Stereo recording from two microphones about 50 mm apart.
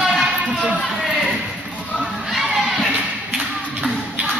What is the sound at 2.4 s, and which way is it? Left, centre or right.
Crowd, centre.